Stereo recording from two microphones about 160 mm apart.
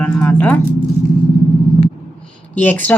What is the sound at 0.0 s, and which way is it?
Speech, 5° left (ahead or behind).